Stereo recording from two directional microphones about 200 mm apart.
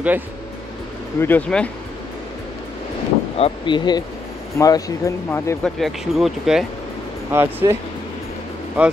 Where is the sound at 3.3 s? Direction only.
25° left (ahead or behind).